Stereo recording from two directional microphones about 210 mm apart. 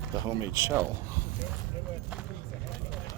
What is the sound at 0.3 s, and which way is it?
Speech, 15° right (ahead or behind).